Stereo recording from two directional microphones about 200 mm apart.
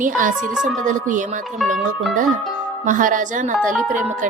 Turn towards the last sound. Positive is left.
turn(degrees=-40)  # may be behind; listen again after turning